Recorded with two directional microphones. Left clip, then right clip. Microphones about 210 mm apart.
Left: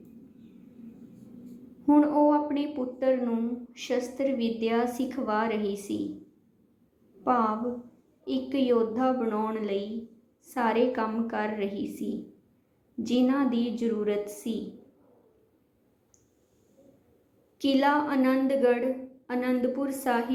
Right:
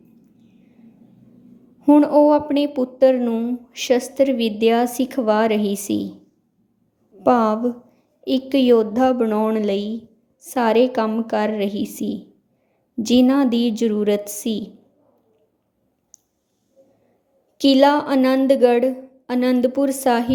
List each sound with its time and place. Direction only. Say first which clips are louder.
1.9 s speech: right 9 dB; 55° right (ahead or behind)
7.3 s a woman's voice: right 9 dB; 55° right (ahead or behind)
16.1 s clicking: right 15 dB; 55° right (ahead or behind)
17.6 s speech: right 10 dB; 55° right (ahead or behind)